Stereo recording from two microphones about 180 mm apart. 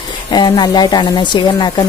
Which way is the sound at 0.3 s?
25° left (ahead or behind).